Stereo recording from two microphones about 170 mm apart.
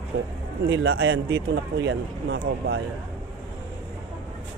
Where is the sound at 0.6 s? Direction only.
90° right.